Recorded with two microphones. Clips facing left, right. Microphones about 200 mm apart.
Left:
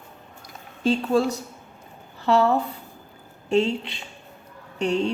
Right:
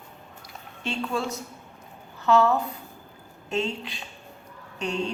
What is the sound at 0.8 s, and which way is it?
A woman's voice, 35° left (ahead or behind).